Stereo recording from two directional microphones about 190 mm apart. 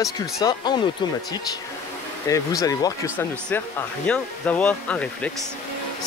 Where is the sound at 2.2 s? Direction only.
15° left (ahead or behind).